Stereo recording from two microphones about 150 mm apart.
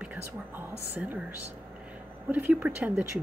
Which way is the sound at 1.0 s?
10° right (ahead or behind).